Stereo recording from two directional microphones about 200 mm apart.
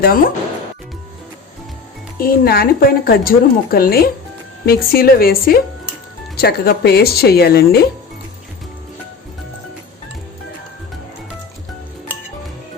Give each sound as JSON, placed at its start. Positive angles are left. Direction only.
{"t": 0.0, "sound": "a woman's voice", "side_deg": 45}
{"t": 2.1, "sound": "a woman's voice", "side_deg": 45}